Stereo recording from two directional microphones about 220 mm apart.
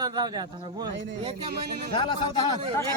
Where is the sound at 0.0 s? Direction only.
15° right (ahead or behind).